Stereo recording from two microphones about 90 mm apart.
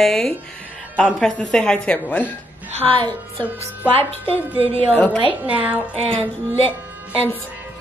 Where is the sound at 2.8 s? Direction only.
70° right (ahead or behind).